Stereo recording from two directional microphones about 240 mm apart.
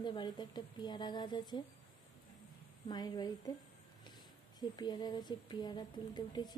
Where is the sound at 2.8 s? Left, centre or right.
Centre.